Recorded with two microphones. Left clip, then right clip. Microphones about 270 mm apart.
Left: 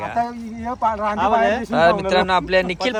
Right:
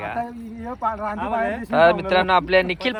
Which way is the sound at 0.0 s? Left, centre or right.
Centre.